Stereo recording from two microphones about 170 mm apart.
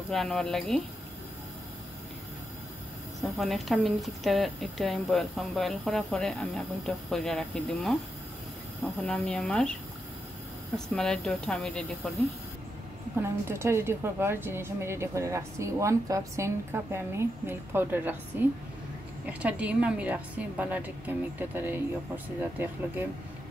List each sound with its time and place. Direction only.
0.1 s a woman's voice: centre (ahead or behind)
3.2 s a woman's voice: centre (ahead or behind)
9.0 s a woman's voice: 5° left (ahead or behind)
11.0 s a woman's voice: 5° left (ahead or behind)
13.2 s a woman's voice: 15° right (ahead or behind)